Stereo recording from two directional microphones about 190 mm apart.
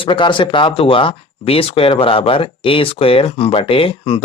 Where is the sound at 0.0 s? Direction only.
25° left (ahead or behind).